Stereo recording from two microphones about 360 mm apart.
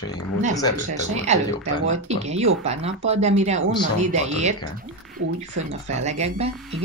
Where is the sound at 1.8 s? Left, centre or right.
Centre.